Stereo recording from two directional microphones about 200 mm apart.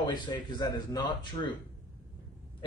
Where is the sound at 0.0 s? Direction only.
20° left (ahead or behind).